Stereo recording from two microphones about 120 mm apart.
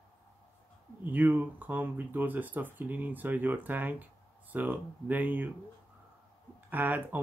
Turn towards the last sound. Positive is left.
turn(degrees=-15)  # may be behind; listen again after turning